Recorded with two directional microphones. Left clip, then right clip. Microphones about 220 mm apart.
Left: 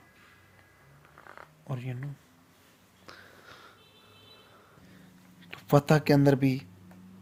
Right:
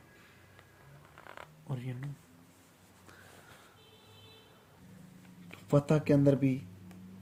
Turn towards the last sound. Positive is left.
turn(degrees=40)  # may be behind; listen again after turning